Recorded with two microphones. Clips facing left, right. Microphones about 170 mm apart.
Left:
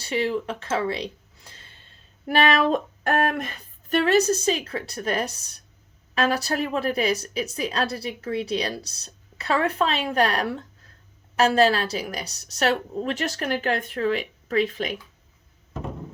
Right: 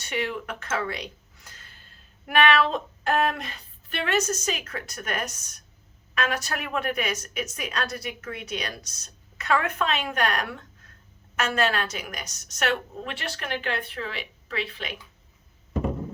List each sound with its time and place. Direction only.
0.0 s speech: 30° left (ahead or behind)